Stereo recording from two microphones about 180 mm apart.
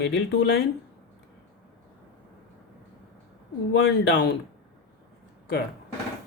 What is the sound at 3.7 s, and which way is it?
Speech, 70° left (ahead or behind).